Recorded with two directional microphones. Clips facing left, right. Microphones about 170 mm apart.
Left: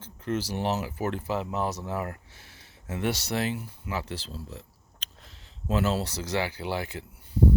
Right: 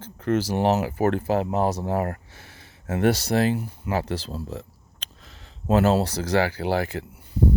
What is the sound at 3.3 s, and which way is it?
Speech, 40° right (ahead or behind).